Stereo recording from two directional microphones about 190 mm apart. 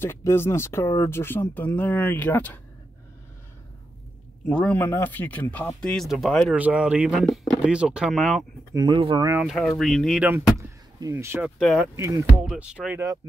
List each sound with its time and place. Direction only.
0.0 s speech: 15° left (ahead or behind)
4.5 s speech: 5° left (ahead or behind)
8.7 s speech: 25° right (ahead or behind)
9.5 s speech: centre (ahead or behind)
11.6 s speech: centre (ahead or behind)
12.0 s speech: 15° right (ahead or behind)
12.4 s speech: 5° right (ahead or behind)
12.8 s speech: 15° right (ahead or behind)